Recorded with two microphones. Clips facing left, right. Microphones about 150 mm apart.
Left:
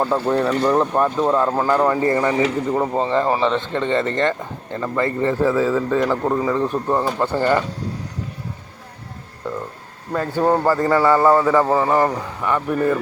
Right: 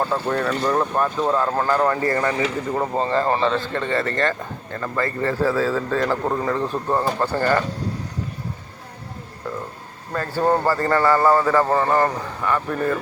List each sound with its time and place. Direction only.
0.1 s speech: 20° left (ahead or behind)
10.1 s a man's voice: 10° left (ahead or behind)